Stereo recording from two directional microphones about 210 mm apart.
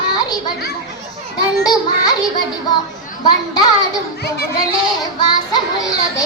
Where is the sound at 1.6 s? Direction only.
20° left (ahead or behind).